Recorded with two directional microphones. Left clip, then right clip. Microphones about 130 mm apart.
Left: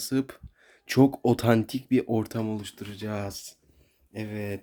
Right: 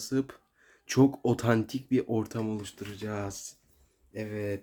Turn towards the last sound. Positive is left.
turn(degrees=70)  # may be behind; listen again after turning